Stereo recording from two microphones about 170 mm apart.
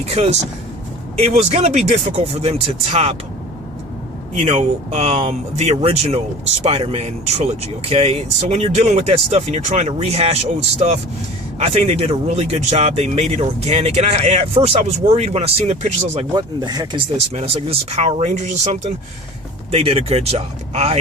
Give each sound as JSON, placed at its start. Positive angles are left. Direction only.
{"t": 0.0, "sound": "speech", "side_deg": -40}
{"t": 4.4, "sound": "speech", "side_deg": -40}
{"t": 11.6, "sound": "speech", "side_deg": -35}
{"t": 16.3, "sound": "speech", "side_deg": -25}
{"t": 17.3, "sound": "speech", "side_deg": -35}